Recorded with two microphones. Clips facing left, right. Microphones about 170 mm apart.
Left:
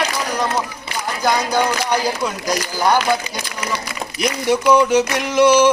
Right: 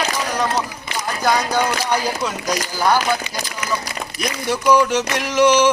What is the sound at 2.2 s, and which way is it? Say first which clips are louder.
Speech: left 1 dB; 10° left (ahead or behind).